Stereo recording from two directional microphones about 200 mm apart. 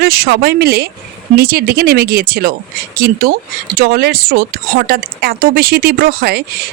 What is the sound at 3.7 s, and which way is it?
Speech, 50° right (ahead or behind).